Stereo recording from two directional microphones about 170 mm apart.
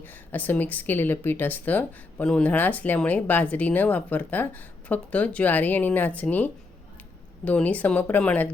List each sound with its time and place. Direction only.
0.0 s a woman's voice: 10° left (ahead or behind)